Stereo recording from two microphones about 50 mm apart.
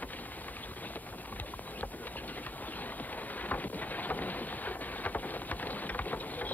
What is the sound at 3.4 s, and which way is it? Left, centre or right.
Boat, left.